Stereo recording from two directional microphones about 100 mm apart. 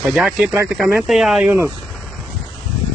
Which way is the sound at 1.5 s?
20° right (ahead or behind).